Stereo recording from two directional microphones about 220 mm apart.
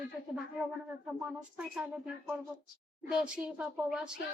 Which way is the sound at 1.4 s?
5° right (ahead or behind).